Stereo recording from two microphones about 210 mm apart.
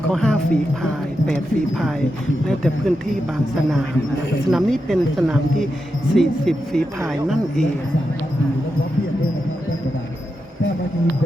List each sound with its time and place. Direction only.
0.1 s speech: centre (ahead or behind)
2.5 s speech: 5° left (ahead or behind)
4.4 s speech: centre (ahead or behind)